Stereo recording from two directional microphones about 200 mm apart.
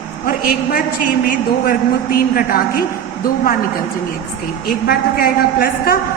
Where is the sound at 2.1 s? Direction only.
45° left (ahead or behind).